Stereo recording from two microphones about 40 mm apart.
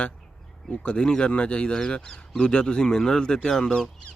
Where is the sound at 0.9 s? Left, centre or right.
Left.